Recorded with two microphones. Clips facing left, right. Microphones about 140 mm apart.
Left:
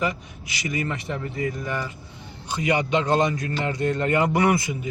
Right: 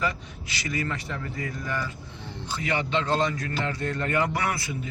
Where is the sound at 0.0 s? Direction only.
15° left (ahead or behind).